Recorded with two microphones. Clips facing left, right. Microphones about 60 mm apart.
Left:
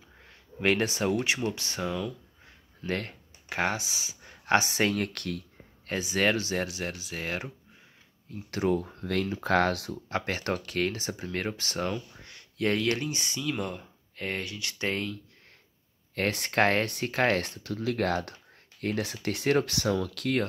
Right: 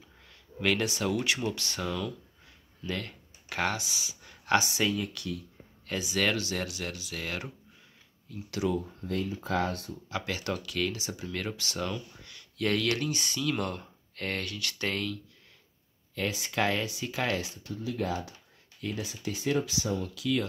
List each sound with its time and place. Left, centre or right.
0.2 s speech: left
2.8 s speech: left
3.4 s speech: left
4.9 s speech: left
5.9 s speech: left
8.7 s speech: left
9.0 s speech: left
10.0 s speech: left
13.4 s speech: centre
16.2 s speech: left